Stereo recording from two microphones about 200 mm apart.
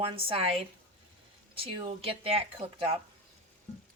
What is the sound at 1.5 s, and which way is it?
A woman's voice, 25° right (ahead or behind).